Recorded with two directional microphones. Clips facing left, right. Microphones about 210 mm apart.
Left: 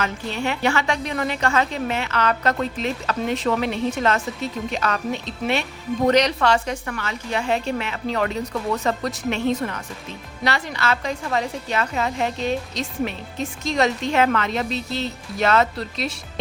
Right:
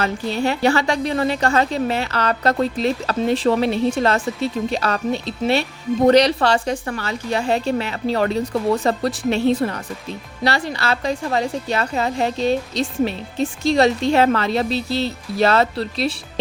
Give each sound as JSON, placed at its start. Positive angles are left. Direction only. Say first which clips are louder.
{"t": 0.0, "sound": "a woman's voice", "louder": "right 5 dB", "side_deg": -35}